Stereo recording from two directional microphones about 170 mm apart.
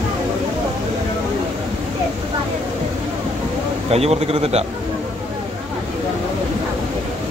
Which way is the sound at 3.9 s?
40° right (ahead or behind).